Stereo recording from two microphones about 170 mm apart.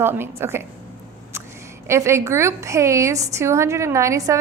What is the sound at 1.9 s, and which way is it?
A woman's voice, 15° right (ahead or behind).